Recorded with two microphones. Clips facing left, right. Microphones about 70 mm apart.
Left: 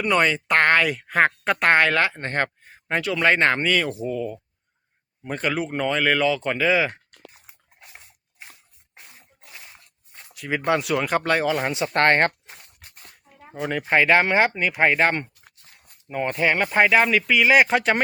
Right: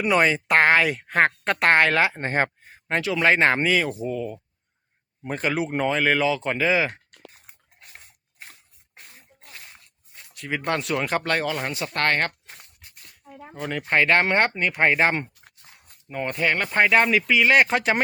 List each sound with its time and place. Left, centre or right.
0.0 s speech: centre
2.0 s speech: centre
2.6 s speech: centre
7.9 s a sound: centre
9.0 s sneeze: centre
10.3 s speech: centre; by 12.3 s left
13.5 s speech: centre
15.6 s dog: right
16.0 s speech: centre